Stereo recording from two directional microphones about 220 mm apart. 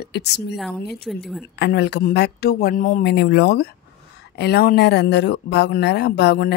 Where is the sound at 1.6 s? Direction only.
50° left (ahead or behind).